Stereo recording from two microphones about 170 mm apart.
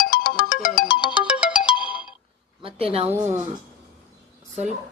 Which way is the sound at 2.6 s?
35° right (ahead or behind).